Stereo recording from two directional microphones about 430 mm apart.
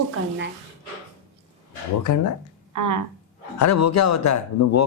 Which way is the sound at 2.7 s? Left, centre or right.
Right.